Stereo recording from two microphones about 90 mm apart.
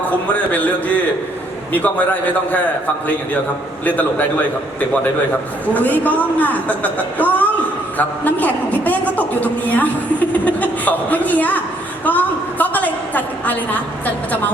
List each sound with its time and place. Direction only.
1.7 s a woman's voice: 15° left (ahead or behind)
5.7 s a woman's voice: 20° left (ahead or behind)
12.0 s a sound: 20° left (ahead or behind)